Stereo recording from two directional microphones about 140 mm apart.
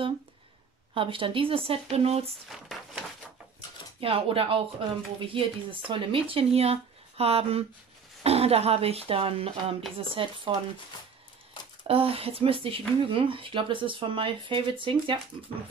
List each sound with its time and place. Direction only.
0.9 s speech: 40° right (ahead or behind)
2.4 s speech: centre (ahead or behind)
4.0 s speech: 40° right (ahead or behind)
11.9 s speech: 45° right (ahead or behind)